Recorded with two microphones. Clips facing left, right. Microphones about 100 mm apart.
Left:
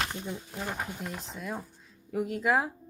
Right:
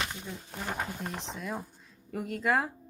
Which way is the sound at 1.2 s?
Centre (ahead or behind).